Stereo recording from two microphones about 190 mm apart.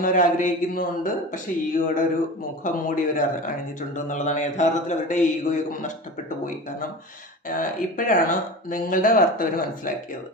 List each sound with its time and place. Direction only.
0.0 s a man's voice: 45° left (ahead or behind)
7.4 s speech: 45° left (ahead or behind)